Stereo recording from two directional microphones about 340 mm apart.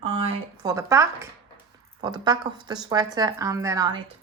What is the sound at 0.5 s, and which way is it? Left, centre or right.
Speech, centre.